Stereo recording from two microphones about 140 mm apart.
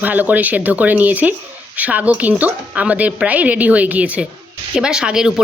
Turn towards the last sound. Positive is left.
turn(degrees=-5)  # may be behind; listen again after turning